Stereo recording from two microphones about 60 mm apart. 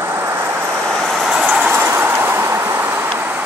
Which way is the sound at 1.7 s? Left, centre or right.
Right.